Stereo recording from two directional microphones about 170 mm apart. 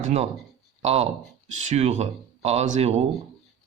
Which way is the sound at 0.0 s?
40° right (ahead or behind).